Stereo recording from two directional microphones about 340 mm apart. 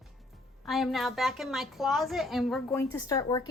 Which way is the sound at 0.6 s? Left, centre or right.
Centre.